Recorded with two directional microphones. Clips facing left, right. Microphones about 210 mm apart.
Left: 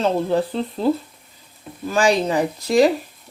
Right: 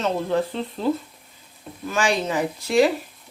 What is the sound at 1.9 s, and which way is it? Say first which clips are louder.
Speech: left 5 dB; 35° left (ahead or behind).